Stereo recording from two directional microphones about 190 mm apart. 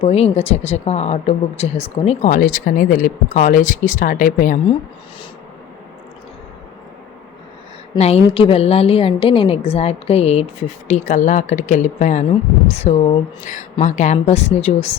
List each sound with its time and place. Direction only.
0.0 s speech: 30° left (ahead or behind)
7.9 s speech: 35° left (ahead or behind)